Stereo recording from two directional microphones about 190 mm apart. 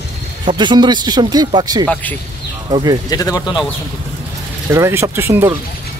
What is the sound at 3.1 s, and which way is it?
Speech, 15° left (ahead or behind).